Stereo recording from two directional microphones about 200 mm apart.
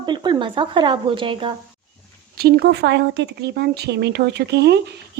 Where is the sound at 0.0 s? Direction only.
20° right (ahead or behind).